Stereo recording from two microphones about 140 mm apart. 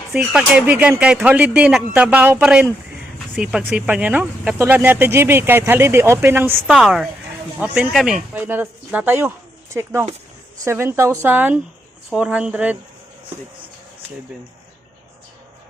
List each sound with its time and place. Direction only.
0.1 s a woman's voice: 10° right (ahead or behind)
4.5 s speech: 15° right (ahead or behind)
6.7 s a woman's voice: 5° right (ahead or behind)